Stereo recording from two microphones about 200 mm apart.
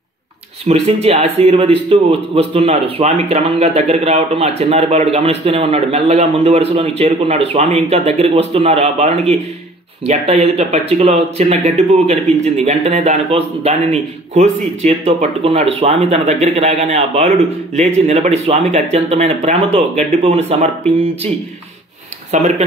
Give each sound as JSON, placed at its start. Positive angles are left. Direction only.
{"t": 0.7, "sound": "speech", "side_deg": -30}
{"t": 22.3, "sound": "speech", "side_deg": -35}